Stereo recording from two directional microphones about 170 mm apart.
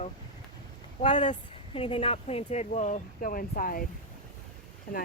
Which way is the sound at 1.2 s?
40° left (ahead or behind).